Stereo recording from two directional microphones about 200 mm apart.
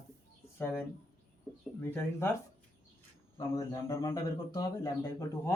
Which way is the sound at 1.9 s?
10° left (ahead or behind).